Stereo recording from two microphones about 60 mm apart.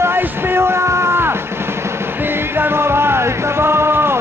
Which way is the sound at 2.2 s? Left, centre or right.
Right.